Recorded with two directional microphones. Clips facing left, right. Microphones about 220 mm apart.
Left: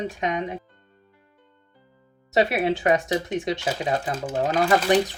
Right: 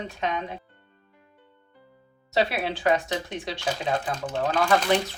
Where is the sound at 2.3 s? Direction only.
20° left (ahead or behind).